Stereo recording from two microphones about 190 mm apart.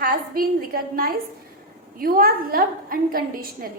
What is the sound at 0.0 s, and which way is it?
A woman's voice, 50° right (ahead or behind).